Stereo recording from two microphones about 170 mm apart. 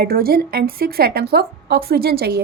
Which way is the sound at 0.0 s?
65° right (ahead or behind).